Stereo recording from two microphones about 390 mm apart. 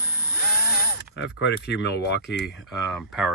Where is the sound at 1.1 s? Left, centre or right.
Left.